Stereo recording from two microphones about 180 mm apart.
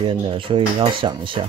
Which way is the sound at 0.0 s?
30° right (ahead or behind).